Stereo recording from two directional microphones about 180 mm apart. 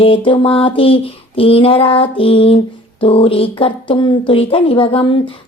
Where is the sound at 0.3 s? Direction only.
30° left (ahead or behind).